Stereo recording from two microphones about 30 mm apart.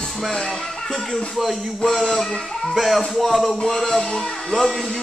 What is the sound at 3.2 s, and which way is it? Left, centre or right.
Music, centre.